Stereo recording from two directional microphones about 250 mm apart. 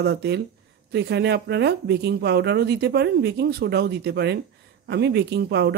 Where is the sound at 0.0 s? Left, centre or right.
Right.